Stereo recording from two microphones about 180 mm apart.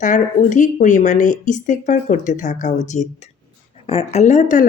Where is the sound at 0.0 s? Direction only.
45° left (ahead or behind).